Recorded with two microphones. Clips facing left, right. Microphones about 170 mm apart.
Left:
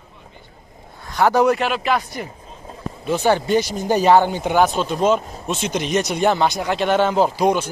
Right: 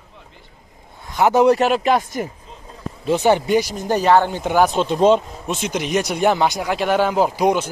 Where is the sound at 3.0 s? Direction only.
20° right (ahead or behind).